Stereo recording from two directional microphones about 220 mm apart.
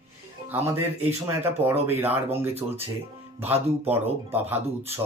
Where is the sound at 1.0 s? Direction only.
10° right (ahead or behind).